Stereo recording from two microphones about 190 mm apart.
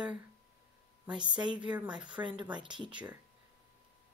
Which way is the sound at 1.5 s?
5° right (ahead or behind).